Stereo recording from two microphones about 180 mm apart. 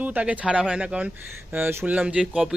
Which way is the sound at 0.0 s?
10° right (ahead or behind).